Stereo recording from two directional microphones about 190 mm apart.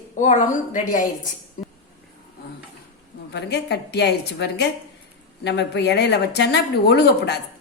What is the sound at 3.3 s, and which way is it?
Speech, 60° left (ahead or behind).